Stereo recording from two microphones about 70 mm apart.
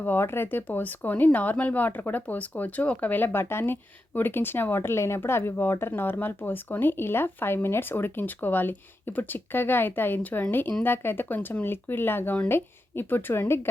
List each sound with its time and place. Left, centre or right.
0.0 s speech: left